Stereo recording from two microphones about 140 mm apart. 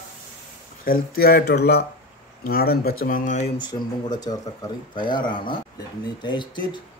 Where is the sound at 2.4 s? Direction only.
90° left; by 3.5 s 60° left (ahead or behind).